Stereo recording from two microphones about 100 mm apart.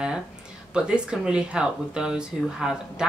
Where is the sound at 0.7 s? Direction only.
10° right (ahead or behind).